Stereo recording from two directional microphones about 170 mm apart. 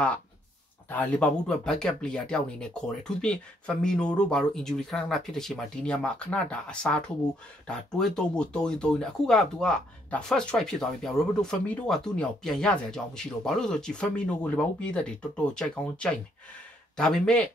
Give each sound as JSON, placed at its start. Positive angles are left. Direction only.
{"t": 0.8, "sound": "speech", "side_deg": 10}